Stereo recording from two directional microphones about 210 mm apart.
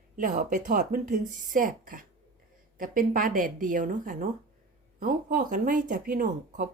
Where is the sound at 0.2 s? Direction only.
40° right (ahead or behind).